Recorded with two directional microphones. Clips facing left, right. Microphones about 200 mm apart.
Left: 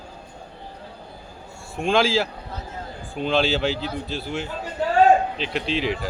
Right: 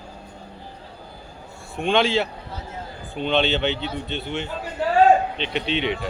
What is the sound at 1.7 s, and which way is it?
Speech, centre (ahead or behind).